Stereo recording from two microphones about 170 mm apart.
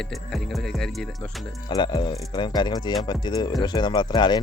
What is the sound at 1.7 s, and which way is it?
Speech, 25° left (ahead or behind).